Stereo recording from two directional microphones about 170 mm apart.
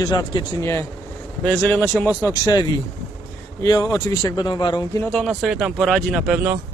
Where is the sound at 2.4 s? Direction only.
20° left (ahead or behind).